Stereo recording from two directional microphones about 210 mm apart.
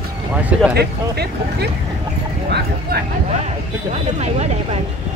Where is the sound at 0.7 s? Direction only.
50° right (ahead or behind).